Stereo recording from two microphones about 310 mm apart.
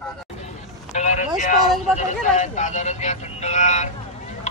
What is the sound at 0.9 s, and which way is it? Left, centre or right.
Vehicle, left.